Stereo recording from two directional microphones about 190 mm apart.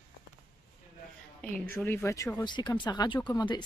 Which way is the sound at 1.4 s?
10° left (ahead or behind).